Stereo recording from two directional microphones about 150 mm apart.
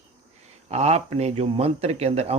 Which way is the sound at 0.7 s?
45° right (ahead or behind).